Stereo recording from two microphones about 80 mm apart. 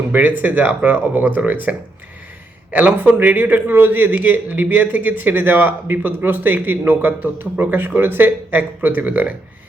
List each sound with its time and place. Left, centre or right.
0.1 s a man's voice: right
2.7 s a man's voice: right